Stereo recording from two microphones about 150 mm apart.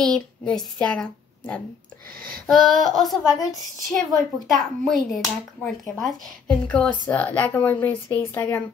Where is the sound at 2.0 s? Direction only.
75° right (ahead or behind).